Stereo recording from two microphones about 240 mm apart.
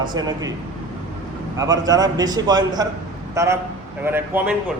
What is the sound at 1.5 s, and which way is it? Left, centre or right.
A man's voice, centre.